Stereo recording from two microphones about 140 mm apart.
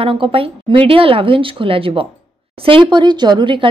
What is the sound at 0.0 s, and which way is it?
Speech, 40° right (ahead or behind).